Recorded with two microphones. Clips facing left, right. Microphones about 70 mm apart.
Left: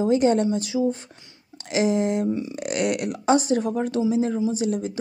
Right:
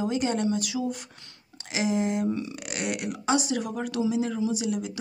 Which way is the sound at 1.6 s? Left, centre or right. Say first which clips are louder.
Left 5 dB; left.